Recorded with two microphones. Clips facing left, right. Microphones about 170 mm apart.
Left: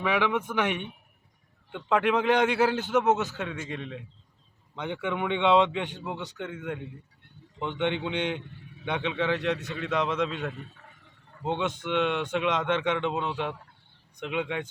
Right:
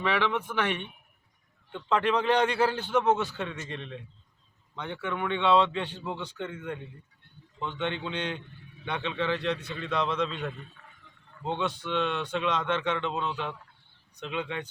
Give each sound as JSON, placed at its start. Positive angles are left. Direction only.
{"t": 0.0, "sound": "a man's voice", "side_deg": 10}
{"t": 11.4, "sound": "a man's voice", "side_deg": 20}